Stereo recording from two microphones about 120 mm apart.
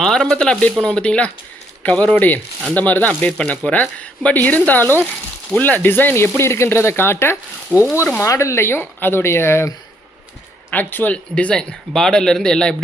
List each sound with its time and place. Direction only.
0.0 s speech: 5° left (ahead or behind)
7.7 s speech: 5° right (ahead or behind)
7.9 s speech: 20° left (ahead or behind)